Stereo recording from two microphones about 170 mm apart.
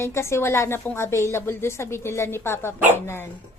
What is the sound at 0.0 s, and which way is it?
Speech, 15° left (ahead or behind).